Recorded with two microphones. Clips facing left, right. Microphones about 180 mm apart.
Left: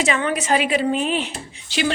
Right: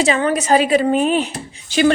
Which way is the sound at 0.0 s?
35° right (ahead or behind).